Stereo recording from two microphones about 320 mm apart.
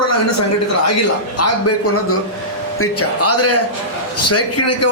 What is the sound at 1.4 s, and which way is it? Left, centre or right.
A man's voice, left.